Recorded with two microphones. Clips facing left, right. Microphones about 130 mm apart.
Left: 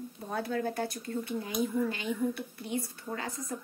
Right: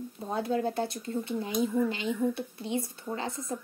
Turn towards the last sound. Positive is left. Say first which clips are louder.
# right 3 dB
turn(degrees=-25)  # may be behind; listen again after turning